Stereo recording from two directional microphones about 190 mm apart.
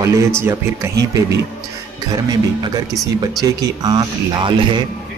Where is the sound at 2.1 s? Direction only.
20° right (ahead or behind).